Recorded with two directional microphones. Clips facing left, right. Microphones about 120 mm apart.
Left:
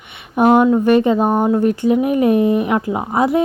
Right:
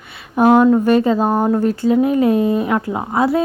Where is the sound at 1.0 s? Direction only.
15° left (ahead or behind).